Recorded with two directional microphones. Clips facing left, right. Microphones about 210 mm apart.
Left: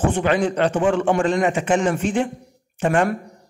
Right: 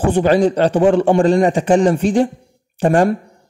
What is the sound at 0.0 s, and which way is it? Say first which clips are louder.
Speech: right 6 dB; 35° right (ahead or behind).